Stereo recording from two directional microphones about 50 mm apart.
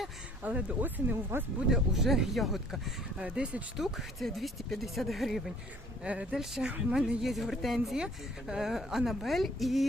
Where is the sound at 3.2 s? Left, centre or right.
Right.